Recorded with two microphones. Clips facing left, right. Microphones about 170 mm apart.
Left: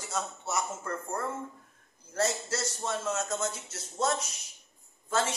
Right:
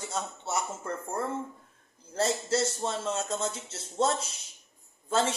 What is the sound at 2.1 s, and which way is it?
Speech, 30° right (ahead or behind).